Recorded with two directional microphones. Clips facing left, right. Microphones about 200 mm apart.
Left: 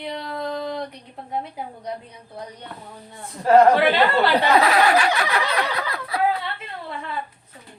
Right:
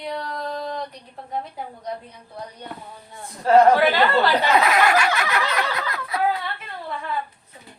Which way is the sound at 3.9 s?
30° left (ahead or behind).